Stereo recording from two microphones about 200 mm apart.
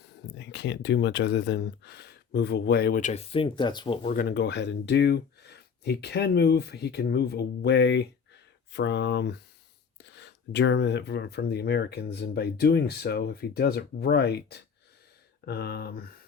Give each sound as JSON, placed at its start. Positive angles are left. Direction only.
{"t": 0.0, "sound": "speech", "side_deg": 60}
{"t": 4.0, "sound": "speech", "side_deg": 45}